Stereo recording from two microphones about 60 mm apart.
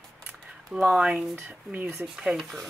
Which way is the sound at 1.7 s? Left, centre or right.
Right.